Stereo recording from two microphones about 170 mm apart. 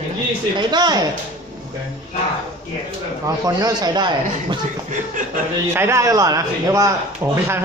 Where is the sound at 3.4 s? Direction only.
20° right (ahead or behind).